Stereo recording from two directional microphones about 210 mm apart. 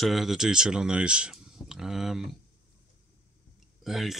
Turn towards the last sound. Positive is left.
turn(degrees=0)  # may be behind; listen again after turning